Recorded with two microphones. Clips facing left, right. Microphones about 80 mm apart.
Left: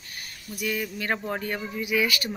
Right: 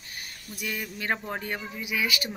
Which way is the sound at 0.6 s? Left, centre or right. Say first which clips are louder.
Left 3 dB; right.